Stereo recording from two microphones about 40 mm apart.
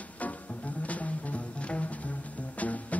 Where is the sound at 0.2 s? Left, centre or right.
Left.